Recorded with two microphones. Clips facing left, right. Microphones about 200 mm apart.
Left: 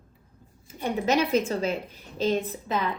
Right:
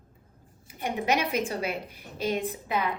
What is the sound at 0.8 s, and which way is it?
Speech, 15° right (ahead or behind).